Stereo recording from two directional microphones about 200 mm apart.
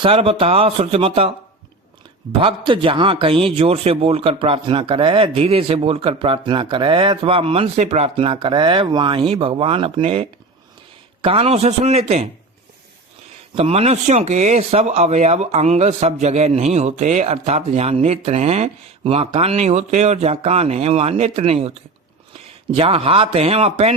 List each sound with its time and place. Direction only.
0.0 s a man's voice: 30° right (ahead or behind)
2.4 s a man's voice: 25° right (ahead or behind)
13.6 s speech: 30° right (ahead or behind)
22.7 s a man's voice: 30° right (ahead or behind)